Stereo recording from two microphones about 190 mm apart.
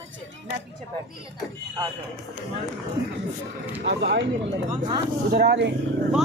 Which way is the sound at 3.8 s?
65° right (ahead or behind).